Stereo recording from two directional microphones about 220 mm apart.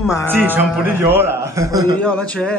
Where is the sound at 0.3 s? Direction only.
10° right (ahead or behind).